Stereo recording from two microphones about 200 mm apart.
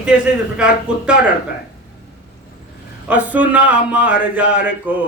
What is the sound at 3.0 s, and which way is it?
Speech, 5° right (ahead or behind).